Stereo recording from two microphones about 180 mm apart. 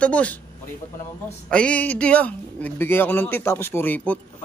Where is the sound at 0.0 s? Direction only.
5° left (ahead or behind).